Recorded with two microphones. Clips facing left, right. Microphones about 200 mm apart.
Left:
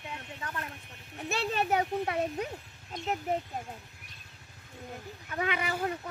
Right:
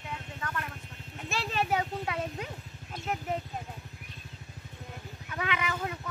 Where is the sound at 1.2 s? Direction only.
50° left (ahead or behind).